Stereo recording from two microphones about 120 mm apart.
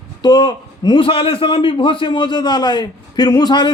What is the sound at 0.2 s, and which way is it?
A man's voice, 35° left (ahead or behind).